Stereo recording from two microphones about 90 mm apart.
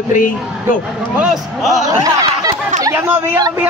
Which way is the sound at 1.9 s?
40° right (ahead or behind).